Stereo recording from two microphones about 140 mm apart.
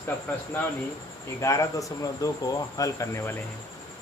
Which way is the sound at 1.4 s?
25° left (ahead or behind).